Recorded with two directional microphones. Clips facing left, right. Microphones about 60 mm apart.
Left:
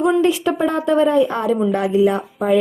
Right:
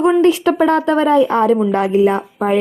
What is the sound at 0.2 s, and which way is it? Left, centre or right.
Speech, right.